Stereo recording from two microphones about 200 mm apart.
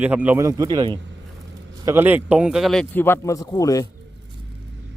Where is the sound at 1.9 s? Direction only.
10° right (ahead or behind); by 3.8 s 15° left (ahead or behind).